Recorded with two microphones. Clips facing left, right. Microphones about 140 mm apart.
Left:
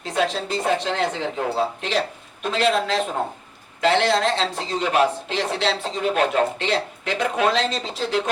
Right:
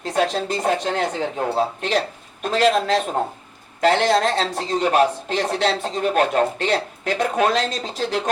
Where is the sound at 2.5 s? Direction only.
40° right (ahead or behind).